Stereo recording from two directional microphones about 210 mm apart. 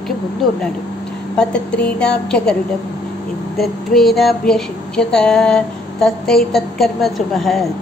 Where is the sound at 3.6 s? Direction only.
Centre (ahead or behind).